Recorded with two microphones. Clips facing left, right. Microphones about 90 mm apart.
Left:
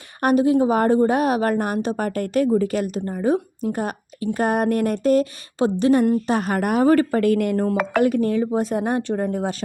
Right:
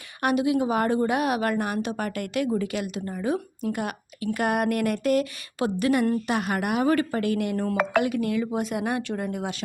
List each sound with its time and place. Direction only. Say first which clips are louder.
0.2 s a woman's voice: left 6 dB; 40° left (ahead or behind)
7.6 s a woman's voice: left 4 dB; 35° left (ahead or behind)